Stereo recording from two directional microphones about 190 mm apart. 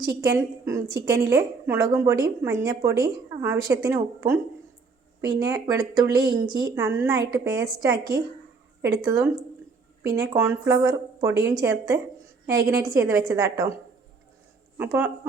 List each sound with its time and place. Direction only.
0.0 s a woman's voice: 20° right (ahead or behind)
14.8 s a woman's voice: 10° right (ahead or behind)